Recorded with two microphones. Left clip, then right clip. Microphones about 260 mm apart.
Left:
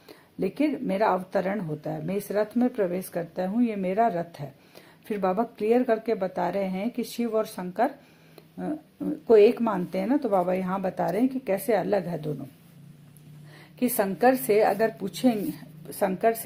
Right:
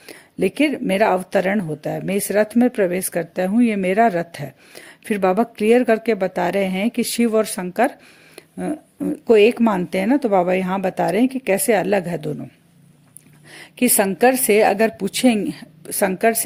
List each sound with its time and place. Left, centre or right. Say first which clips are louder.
0.0 s speech: right 9 dB; right
13.5 s speech: right 9 dB; right